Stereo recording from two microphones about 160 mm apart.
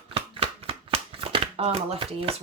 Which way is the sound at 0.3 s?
35° right (ahead or behind).